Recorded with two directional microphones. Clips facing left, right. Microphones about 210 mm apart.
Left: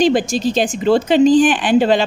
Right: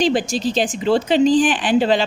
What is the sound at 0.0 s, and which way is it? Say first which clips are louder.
Speech: left 4 dB; 45° left (ahead or behind).